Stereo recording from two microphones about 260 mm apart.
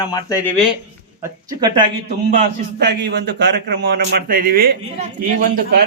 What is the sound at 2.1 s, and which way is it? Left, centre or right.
A man's voice, right.